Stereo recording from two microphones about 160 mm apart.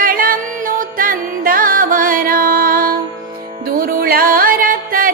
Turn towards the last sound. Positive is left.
turn(degrees=-60)  # may be behind; listen again after turning